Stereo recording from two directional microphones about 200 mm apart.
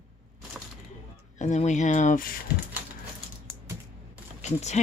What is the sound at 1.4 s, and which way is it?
Speech, 35° left (ahead or behind).